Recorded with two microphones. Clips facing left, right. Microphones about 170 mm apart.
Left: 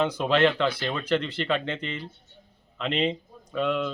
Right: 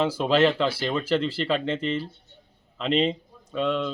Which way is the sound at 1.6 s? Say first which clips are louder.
Right 6 dB; 30° right (ahead or behind).